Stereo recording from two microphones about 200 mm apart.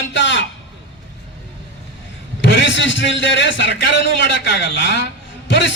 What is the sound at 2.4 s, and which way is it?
A man's voice, 65° left (ahead or behind).